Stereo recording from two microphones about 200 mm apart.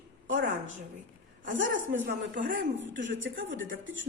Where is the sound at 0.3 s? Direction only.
70° right (ahead or behind).